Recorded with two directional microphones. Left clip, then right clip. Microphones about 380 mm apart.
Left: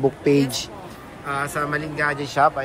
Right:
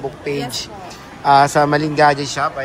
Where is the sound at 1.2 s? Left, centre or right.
Centre.